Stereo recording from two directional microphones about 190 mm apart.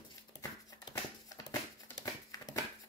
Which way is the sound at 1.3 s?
20° left (ahead or behind).